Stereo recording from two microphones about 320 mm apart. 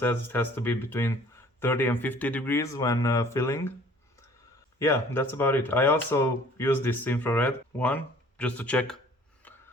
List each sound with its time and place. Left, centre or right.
0.0 s speech: centre
4.8 s speech: centre